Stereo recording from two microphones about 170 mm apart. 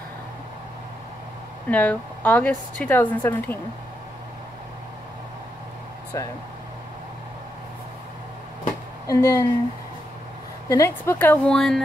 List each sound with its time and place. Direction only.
1.7 s a woman's voice: 10° left (ahead or behind)
6.1 s a woman's voice: 15° left (ahead or behind)
9.0 s a woman's voice: 15° left (ahead or behind)
10.7 s a woman's voice: 15° left (ahead or behind)